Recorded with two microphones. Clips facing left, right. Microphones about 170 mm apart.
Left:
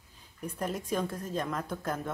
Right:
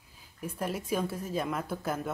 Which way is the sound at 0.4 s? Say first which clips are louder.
Even; 5° right (ahead or behind).